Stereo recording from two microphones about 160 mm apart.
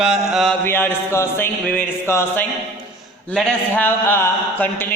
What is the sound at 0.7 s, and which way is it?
Speech, 15° left (ahead or behind).